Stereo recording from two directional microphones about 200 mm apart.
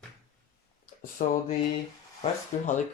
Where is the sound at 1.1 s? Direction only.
40° left (ahead or behind).